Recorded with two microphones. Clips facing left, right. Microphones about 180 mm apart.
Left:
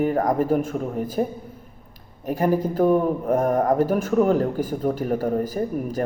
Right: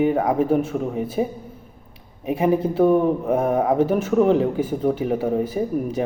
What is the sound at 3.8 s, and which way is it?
Speech, 10° left (ahead or behind).